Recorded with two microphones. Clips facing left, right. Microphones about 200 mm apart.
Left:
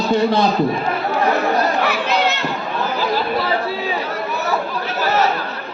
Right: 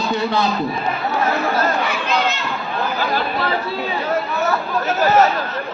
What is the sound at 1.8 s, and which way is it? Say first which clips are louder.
Crowd: left 2 dB; 65° left (ahead or behind).